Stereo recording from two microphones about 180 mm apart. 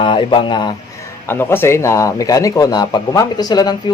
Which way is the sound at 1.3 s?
15° left (ahead or behind).